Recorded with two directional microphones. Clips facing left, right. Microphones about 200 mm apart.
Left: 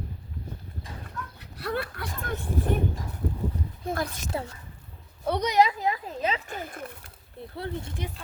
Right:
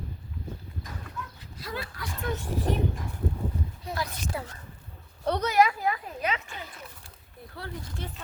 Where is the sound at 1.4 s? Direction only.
65° left (ahead or behind).